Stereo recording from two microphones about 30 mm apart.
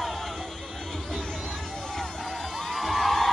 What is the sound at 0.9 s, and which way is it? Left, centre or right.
Music, centre.